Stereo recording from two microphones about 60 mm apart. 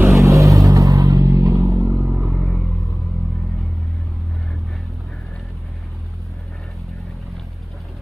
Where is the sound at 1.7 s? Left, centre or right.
Right.